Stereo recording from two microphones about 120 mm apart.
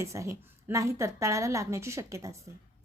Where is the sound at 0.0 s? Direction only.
25° right (ahead or behind).